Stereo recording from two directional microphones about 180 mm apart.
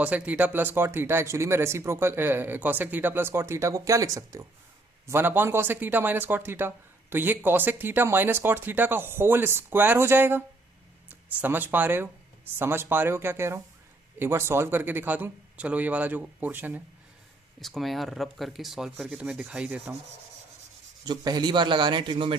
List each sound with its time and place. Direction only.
0.0 s speech: 10° right (ahead or behind)
17.6 s speech: centre (ahead or behind)
21.0 s a man's voice: 25° right (ahead or behind)